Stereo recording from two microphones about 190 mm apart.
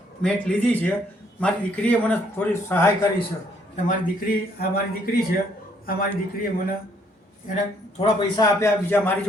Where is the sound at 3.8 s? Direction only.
45° left (ahead or behind).